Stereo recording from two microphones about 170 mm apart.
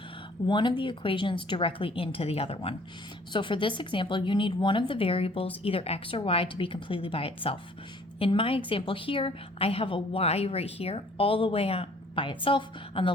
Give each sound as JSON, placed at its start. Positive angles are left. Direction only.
{"t": 0.4, "sound": "a woman's voice", "side_deg": 25}